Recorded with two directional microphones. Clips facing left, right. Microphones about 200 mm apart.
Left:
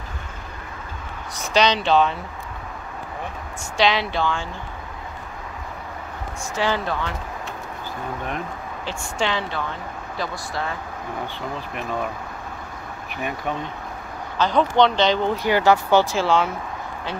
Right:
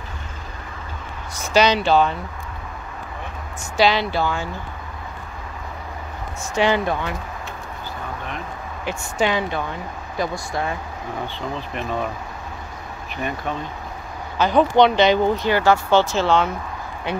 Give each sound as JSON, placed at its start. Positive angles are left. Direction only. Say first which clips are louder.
{"t": 1.4, "sound": "speech", "louder": "right 2 dB", "side_deg": -5}
{"t": 3.7, "sound": "speech", "louder": "right 2 dB", "side_deg": -5}
{"t": 6.5, "sound": "speech", "louder": "right 4 dB", "side_deg": -15}
{"t": 8.8, "sound": "speech", "louder": "right 4 dB", "side_deg": -15}
{"t": 13.2, "sound": "speech", "louder": "right 1 dB", "side_deg": 10}
{"t": 14.4, "sound": "speech", "louder": "right 3 dB", "side_deg": -10}
{"t": 15.3, "sound": "speech", "louder": "even", "side_deg": 15}